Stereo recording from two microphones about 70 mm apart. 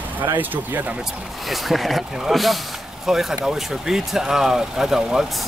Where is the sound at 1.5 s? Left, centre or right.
Centre.